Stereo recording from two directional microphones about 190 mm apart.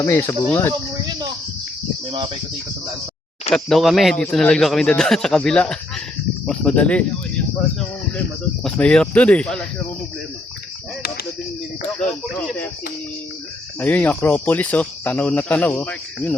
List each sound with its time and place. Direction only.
0.0 s speech: 15° left (ahead or behind)
2.0 s cricket: 30° right (ahead or behind)
3.5 s a man's voice: centre (ahead or behind)
8.6 s a man's voice: 5° left (ahead or behind)
11.9 s a man's voice: centre (ahead or behind)
13.7 s speech: 10° left (ahead or behind)